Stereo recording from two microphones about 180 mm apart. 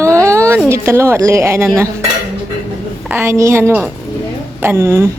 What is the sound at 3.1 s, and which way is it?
A woman's voice, 15° right (ahead or behind).